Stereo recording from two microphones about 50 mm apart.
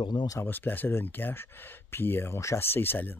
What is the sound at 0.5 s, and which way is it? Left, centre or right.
Speech, left.